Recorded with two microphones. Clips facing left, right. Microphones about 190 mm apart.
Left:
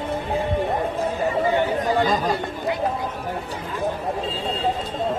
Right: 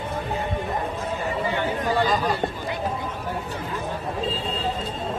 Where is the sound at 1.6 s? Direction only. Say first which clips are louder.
Left 3 dB; 20° left (ahead or behind).